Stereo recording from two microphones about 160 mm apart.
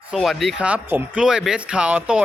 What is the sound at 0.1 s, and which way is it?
A man's voice, centre (ahead or behind).